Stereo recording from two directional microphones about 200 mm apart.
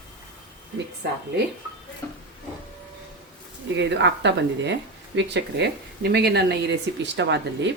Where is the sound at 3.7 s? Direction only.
60° right (ahead or behind).